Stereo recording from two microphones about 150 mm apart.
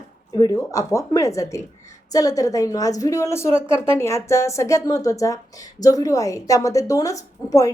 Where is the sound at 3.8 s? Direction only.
15° left (ahead or behind).